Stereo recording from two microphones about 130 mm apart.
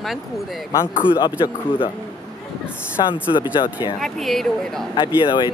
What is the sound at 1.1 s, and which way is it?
Speech, 35° left (ahead or behind).